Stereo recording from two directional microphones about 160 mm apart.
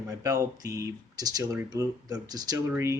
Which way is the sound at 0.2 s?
20° right (ahead or behind).